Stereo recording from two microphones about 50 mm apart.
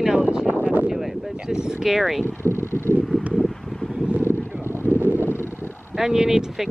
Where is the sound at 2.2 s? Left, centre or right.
Left.